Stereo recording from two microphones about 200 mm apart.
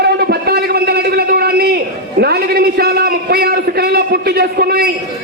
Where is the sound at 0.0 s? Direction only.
55° right (ahead or behind).